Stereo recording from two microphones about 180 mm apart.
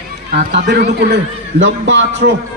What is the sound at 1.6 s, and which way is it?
Speech, 85° right.